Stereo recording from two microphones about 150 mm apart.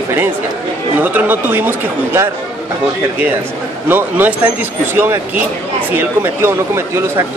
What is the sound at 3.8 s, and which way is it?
Speech, 10° right (ahead or behind).